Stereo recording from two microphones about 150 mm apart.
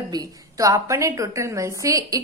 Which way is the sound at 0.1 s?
25° right (ahead or behind).